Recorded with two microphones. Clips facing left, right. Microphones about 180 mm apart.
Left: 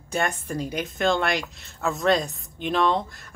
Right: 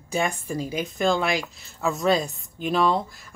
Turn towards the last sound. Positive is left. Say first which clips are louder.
# right 1 dB
turn(degrees=-5)  # may be behind; listen again after turning